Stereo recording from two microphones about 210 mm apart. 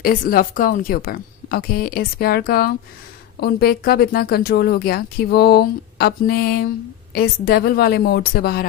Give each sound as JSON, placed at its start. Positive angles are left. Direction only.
{"t": 0.0, "sound": "speech", "side_deg": 45}